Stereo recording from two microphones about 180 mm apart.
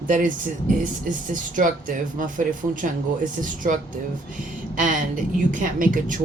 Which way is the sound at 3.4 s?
45° right (ahead or behind).